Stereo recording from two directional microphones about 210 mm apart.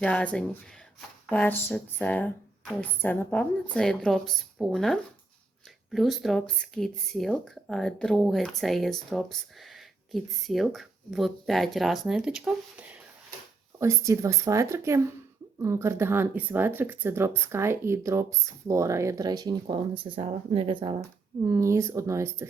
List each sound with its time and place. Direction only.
0.0 s speech: 5° left (ahead or behind); by 20.9 s 25° right (ahead or behind)
21.4 s speech: 15° right (ahead or behind)